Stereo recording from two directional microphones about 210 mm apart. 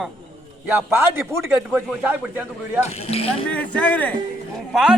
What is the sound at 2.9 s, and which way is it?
Speech, 30° left (ahead or behind).